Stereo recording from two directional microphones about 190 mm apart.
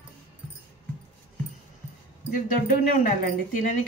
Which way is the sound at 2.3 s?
45° left (ahead or behind).